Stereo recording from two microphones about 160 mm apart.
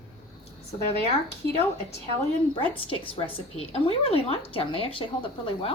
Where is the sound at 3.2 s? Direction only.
35° left (ahead or behind).